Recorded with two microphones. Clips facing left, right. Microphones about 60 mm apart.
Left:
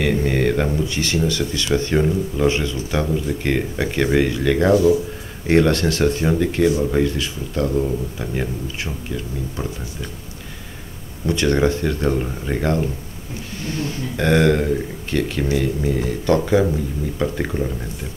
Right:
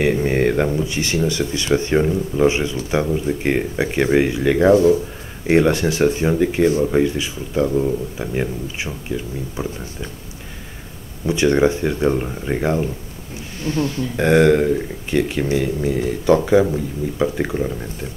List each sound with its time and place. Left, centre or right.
0.0 s speech: centre
0.8 s speech: right
11.2 s speech: centre
13.7 s speech: right
14.1 s speech: centre